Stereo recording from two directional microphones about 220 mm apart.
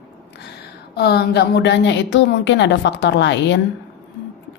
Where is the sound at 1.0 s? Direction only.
50° left (ahead or behind).